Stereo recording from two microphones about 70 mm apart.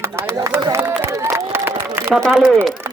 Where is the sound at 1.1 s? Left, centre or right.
Right.